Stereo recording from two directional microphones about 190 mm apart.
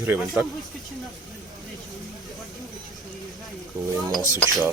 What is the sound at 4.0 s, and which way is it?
Dishes, 20° right (ahead or behind).